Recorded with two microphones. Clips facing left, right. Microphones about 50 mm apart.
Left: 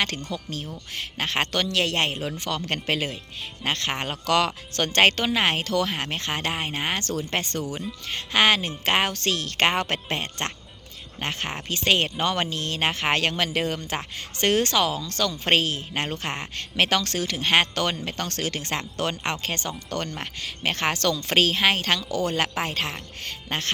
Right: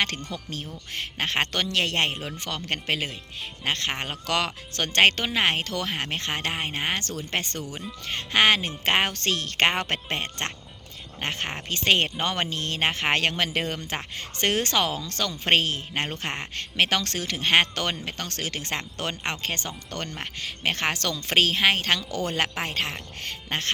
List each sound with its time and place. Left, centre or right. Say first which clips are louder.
0.0 s speech: left 1 dB; right
2.6 s speech: even; centre
7.0 s speech: left 3 dB; centre